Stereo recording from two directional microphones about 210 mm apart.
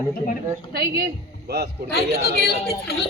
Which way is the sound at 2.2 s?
50° left (ahead or behind).